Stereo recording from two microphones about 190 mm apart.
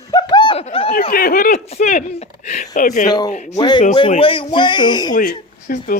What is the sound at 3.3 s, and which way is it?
Speech, 35° left (ahead or behind).